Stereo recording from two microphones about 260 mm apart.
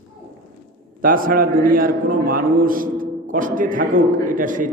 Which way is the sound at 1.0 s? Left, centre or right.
Right.